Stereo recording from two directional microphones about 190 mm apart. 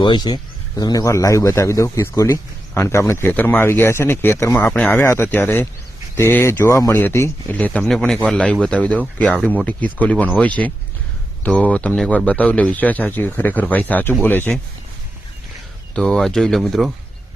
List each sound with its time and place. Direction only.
0.0 s a man's voice: 25° left (ahead or behind)
16.0 s speech: 5° left (ahead or behind)